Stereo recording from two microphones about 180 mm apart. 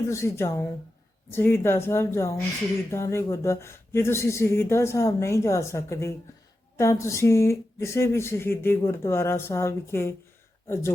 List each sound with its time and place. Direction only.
0.1 s speech: 15° left (ahead or behind)